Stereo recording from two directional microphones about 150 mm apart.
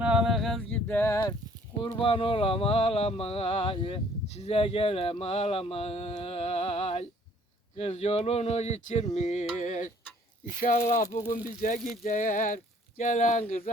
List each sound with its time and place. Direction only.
0.0 s a sound: 5° right (ahead or behind)
0.9 s speech: 15° left (ahead or behind)
1.8 s speech: 35° left (ahead or behind)
7.8 s music: 45° left (ahead or behind)
10.6 s speech: 65° left (ahead or behind)
10.8 s music: 50° left (ahead or behind)
11.4 s speech: 60° left (ahead or behind)